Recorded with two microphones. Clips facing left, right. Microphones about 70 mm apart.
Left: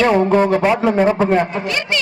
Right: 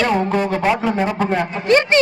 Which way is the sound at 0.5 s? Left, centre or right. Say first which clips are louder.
Left 3 dB; centre.